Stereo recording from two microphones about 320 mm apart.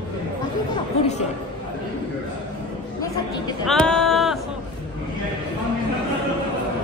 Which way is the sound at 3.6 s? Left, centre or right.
Centre.